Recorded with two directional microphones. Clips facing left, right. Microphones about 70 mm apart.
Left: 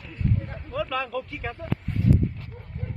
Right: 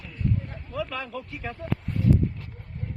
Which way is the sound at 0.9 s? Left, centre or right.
Left.